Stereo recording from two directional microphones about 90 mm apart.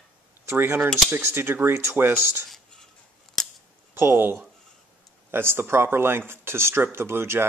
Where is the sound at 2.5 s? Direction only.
5° left (ahead or behind).